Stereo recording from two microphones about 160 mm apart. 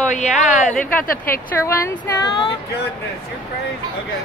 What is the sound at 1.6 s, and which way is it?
Speech, 20° left (ahead or behind).